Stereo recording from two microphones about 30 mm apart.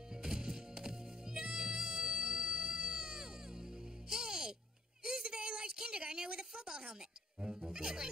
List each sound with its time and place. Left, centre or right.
0.1 s music: right
5.0 s a sound: right
6.9 s music: right